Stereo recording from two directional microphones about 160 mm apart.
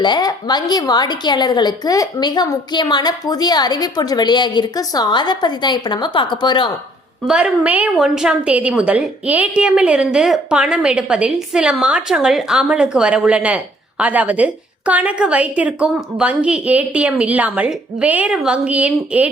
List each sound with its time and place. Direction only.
0.0 s a woman's voice: 25° left (ahead or behind)
7.3 s a woman's voice: 5° right (ahead or behind)